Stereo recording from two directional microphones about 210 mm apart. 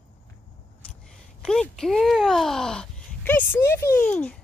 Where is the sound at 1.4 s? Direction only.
5° left (ahead or behind).